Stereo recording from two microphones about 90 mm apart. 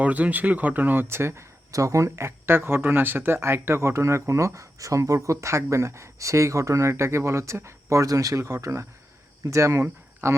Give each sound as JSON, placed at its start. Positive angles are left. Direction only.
{"t": 0.0, "sound": "speech", "side_deg": -15}